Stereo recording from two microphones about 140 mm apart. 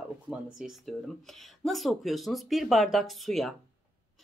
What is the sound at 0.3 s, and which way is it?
Speech, 5° right (ahead or behind).